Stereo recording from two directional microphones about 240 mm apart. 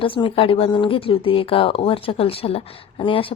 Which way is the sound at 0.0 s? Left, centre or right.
Left.